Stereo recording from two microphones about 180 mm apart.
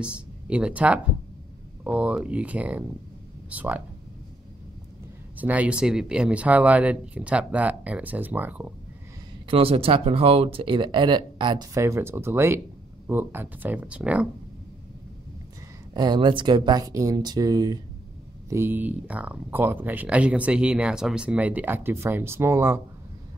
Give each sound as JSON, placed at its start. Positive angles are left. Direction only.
{"t": 0.0, "sound": "speech", "side_deg": -5}
{"t": 5.4, "sound": "speech", "side_deg": -10}
{"t": 9.5, "sound": "speech", "side_deg": -30}
{"t": 15.9, "sound": "speech", "side_deg": -25}